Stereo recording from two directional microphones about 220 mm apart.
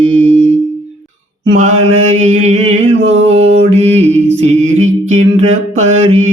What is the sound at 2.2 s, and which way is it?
Mantra, 30° right (ahead or behind).